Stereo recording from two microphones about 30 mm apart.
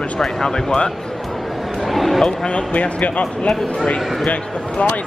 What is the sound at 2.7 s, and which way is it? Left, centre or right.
Speech, left.